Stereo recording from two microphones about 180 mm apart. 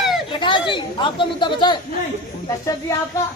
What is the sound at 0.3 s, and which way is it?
A woman's voice, 25° left (ahead or behind).